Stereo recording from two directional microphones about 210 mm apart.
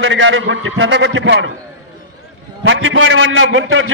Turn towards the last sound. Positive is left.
turn(degrees=-70)  # may be behind; listen again after turning